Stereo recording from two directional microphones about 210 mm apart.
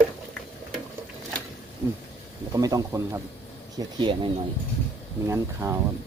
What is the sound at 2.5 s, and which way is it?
Speech, 15° right (ahead or behind).